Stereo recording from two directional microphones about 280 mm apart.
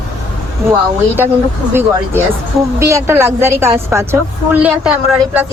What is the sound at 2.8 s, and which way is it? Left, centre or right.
A woman's voice, centre.